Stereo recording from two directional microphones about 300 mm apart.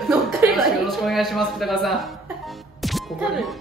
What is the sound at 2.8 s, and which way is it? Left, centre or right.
Music, centre.